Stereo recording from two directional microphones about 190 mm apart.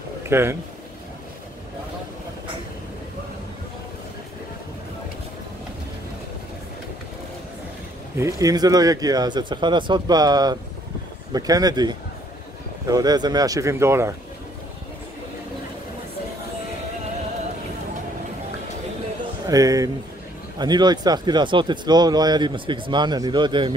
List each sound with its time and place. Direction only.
0.3 s speech: 15° right (ahead or behind)
8.2 s speech: 15° right (ahead or behind)
19.4 s speech: 20° right (ahead or behind)